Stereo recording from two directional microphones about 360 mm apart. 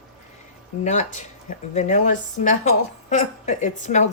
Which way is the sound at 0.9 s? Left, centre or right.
Left.